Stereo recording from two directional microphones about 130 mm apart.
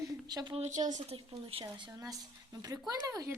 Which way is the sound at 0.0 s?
30° right (ahead or behind).